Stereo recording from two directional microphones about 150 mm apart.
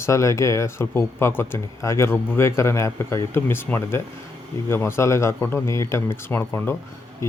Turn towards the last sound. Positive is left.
turn(degrees=20)  # may be behind; listen again after turning